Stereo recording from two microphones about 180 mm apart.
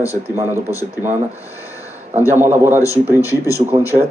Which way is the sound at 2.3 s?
10° right (ahead or behind).